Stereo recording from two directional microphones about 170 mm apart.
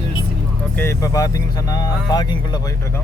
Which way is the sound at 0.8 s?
15° left (ahead or behind).